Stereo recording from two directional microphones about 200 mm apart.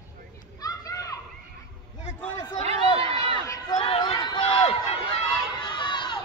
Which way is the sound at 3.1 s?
30° right (ahead or behind).